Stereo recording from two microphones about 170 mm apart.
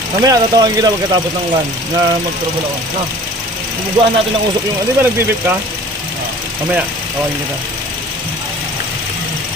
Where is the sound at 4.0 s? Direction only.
30° right (ahead or behind).